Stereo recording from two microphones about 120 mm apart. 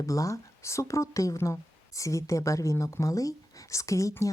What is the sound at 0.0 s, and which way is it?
Speech, 25° left (ahead or behind).